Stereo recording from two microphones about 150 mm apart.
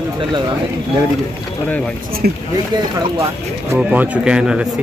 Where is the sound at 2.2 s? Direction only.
75° right (ahead or behind).